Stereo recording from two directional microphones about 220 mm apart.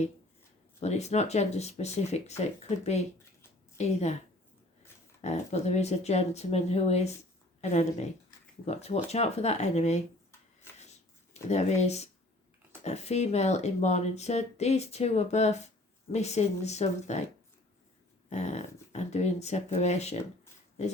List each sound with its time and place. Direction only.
0.8 s speech: 30° left (ahead or behind)
5.2 s speech: 30° left (ahead or behind)
11.4 s speech: 30° left (ahead or behind)
18.3 s speech: 30° left (ahead or behind)